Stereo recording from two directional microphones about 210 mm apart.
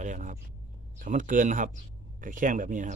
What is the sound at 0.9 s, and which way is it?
Speech, 40° right (ahead or behind).